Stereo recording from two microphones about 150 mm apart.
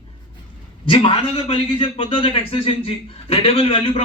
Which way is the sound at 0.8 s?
40° left (ahead or behind).